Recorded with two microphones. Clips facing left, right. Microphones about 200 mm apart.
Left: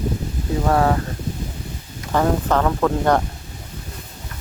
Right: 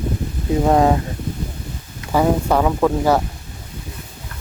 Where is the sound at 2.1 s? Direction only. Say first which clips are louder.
Right 2 dB; 10° right (ahead or behind).